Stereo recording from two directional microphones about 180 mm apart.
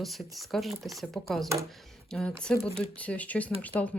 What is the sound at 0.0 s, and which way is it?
Speech, centre (ahead or behind).